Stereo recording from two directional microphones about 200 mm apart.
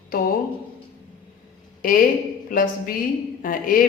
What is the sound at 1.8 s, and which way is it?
A man's voice, 45° left (ahead or behind).